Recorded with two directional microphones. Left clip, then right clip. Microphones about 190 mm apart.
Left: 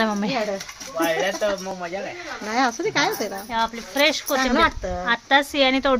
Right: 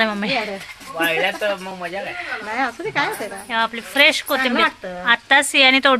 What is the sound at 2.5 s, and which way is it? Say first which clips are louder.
Speech: left 2 dB; 80° left.